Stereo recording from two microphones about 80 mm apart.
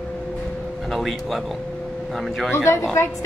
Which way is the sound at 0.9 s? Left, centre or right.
Centre.